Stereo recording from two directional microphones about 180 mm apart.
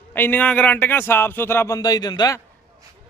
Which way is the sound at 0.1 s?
10° left (ahead or behind).